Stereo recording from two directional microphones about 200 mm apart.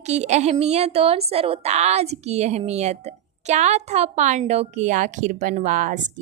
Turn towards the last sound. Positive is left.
turn(degrees=-40)  # may be behind; listen again after turning